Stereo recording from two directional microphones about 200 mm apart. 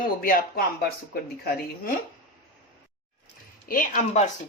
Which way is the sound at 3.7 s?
40° left (ahead or behind).